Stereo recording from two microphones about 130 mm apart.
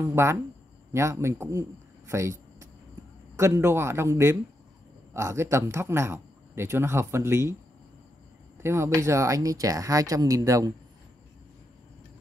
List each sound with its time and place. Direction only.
0.0 s speech: 20° right (ahead or behind)
8.5 s speech: 20° right (ahead or behind)